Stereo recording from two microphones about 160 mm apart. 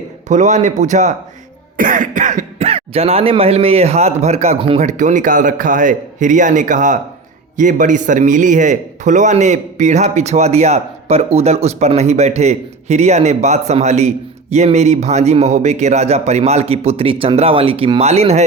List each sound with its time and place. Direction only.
0.3 s a man's voice: 50° right (ahead or behind)